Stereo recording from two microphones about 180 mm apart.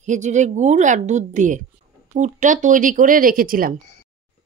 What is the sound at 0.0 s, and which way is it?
A woman's voice, 40° right (ahead or behind).